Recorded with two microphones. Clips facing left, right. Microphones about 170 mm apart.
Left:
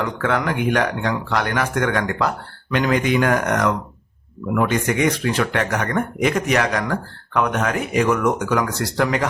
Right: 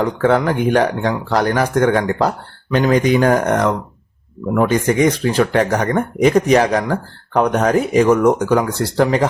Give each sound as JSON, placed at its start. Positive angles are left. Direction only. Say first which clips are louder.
{"t": 0.0, "sound": "speech", "louder": "right 6 dB", "side_deg": -35}